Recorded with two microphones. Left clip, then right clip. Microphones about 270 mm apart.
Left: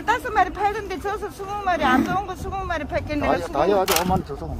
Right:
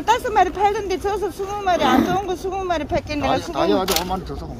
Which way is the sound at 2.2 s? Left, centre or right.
Centre.